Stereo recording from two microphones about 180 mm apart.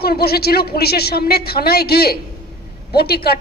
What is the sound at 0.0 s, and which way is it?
A woman's voice, 60° left (ahead or behind).